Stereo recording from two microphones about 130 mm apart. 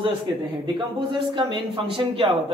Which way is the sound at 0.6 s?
35° right (ahead or behind).